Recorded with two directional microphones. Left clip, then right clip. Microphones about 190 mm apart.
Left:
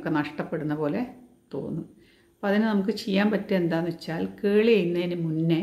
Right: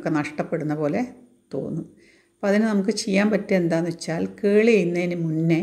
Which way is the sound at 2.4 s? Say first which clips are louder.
Right 4 dB; 20° right (ahead or behind).